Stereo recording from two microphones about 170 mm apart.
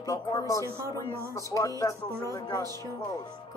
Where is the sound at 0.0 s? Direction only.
20° left (ahead or behind).